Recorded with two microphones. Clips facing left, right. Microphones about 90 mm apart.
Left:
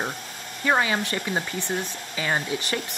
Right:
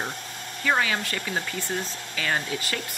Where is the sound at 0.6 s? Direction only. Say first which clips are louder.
Left 2 dB; 20° left (ahead or behind).